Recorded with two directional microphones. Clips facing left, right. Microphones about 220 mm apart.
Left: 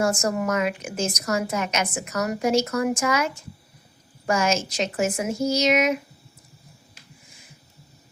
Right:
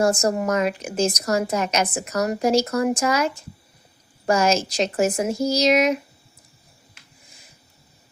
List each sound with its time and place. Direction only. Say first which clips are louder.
0.0 s a woman's voice: right 3 dB; 35° right (ahead or behind)